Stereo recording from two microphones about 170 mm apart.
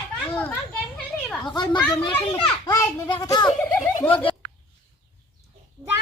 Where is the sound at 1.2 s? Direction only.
Centre (ahead or behind).